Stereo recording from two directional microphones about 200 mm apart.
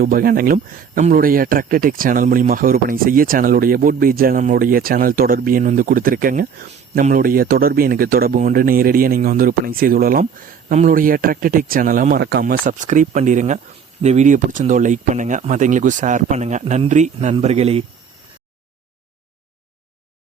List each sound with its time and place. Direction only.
0.0 s speech: 45° right (ahead or behind); by 17.8 s 30° right (ahead or behind)